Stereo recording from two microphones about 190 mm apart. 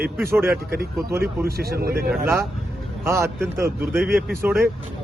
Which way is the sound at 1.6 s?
55° right (ahead or behind).